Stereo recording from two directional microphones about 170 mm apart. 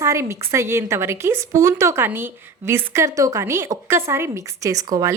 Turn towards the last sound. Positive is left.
turn(degrees=-20)  # may be behind; listen again after turning